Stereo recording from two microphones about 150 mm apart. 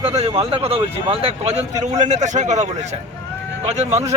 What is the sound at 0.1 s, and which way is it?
A man's voice, 45° right (ahead or behind).